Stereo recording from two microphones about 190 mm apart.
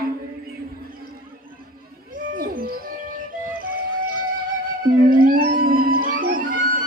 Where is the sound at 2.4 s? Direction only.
50° right (ahead or behind).